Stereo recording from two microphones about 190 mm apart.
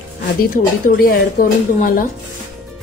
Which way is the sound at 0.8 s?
50° left (ahead or behind).